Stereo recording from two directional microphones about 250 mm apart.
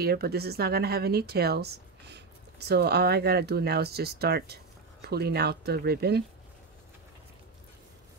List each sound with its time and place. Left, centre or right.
0.0 s speech: right